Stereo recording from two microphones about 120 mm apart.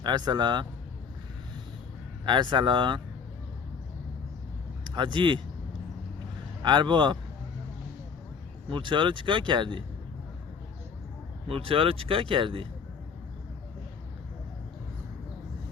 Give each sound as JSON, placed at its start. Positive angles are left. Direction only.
{"t": 0.0, "sound": "speech", "side_deg": -35}
{"t": 2.2, "sound": "speech", "side_deg": -40}
{"t": 4.8, "sound": "speech", "side_deg": -40}
{"t": 6.6, "sound": "speech", "side_deg": -40}
{"t": 8.7, "sound": "speech", "side_deg": -45}
{"t": 11.4, "sound": "speech", "side_deg": -50}